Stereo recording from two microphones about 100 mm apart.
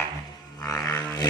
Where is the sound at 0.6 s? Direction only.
35° left (ahead or behind).